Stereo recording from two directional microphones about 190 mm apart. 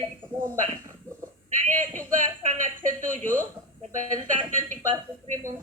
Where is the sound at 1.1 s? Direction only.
10° left (ahead or behind).